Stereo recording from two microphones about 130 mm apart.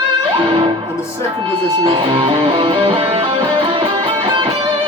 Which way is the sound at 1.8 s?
40° right (ahead or behind).